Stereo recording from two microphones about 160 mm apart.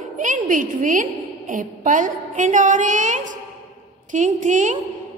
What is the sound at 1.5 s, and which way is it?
A woman's voice, 55° right (ahead or behind).